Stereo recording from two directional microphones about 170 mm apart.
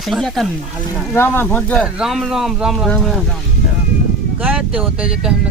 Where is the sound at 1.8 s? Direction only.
5° right (ahead or behind).